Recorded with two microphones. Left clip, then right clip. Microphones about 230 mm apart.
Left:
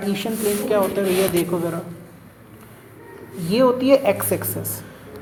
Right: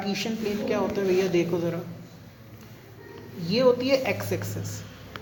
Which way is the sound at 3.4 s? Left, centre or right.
Left.